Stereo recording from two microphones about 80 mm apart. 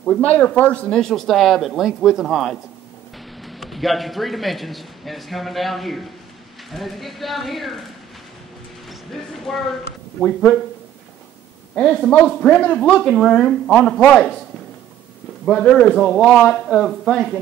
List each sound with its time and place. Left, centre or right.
0.0 s speech: centre
1.0 s a man's voice: centre
8.8 s music: centre
10.2 s speech: centre
11.7 s speech: centre
15.4 s speech: centre